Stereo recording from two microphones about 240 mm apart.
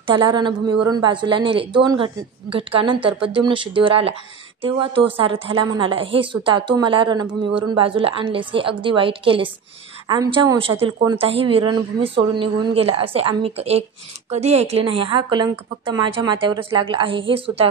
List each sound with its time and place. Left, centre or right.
0.0 s a woman's voice: right